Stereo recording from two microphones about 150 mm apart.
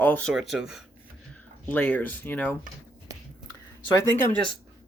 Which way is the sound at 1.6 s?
10° left (ahead or behind).